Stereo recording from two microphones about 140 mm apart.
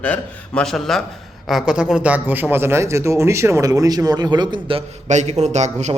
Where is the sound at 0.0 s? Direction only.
10° left (ahead or behind); by 4.8 s 35° right (ahead or behind).